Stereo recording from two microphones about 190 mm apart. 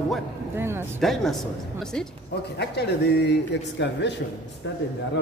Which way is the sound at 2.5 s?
60° left (ahead or behind).